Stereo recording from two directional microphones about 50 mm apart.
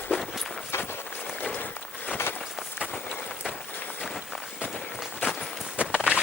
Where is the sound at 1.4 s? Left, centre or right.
Left.